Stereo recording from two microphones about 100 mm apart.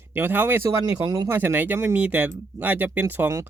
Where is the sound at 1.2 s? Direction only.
25° right (ahead or behind).